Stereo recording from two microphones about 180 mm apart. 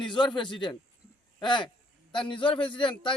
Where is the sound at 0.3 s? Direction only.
25° left (ahead or behind).